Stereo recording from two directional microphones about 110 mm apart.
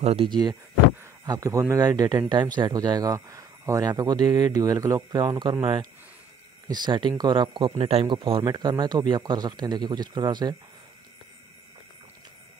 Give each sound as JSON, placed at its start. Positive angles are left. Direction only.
{"t": 0.0, "sound": "speech", "side_deg": -60}
{"t": 0.3, "sound": "speech", "side_deg": -40}
{"t": 7.7, "sound": "speech", "side_deg": -65}